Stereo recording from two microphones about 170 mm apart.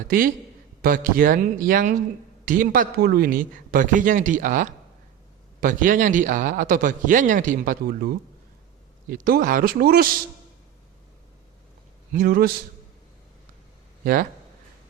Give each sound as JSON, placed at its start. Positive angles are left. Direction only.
{"t": 0.8, "sound": "a man's voice", "side_deg": -55}
{"t": 12.1, "sound": "speech", "side_deg": -60}
{"t": 14.0, "sound": "speech", "side_deg": -60}